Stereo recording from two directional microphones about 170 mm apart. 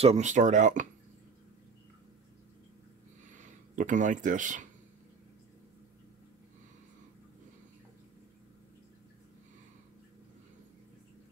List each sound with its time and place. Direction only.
0.0 s speech: 40° right (ahead or behind)
3.3 s speech: 50° right (ahead or behind)